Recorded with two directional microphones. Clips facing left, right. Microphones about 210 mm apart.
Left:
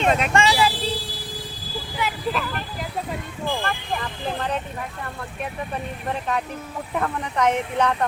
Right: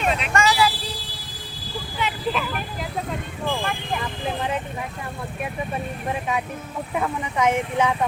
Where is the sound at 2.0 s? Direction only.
5° left (ahead or behind).